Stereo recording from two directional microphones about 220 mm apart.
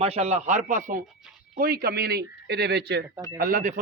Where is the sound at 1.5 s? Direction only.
40° right (ahead or behind).